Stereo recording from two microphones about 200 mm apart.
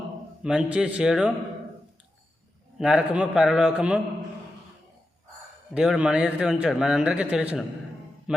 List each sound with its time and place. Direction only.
0.4 s speech: 5° right (ahead or behind)
2.7 s speech: 5° right (ahead or behind)
5.7 s speech: 5° right (ahead or behind)
8.3 s music: 5° right (ahead or behind)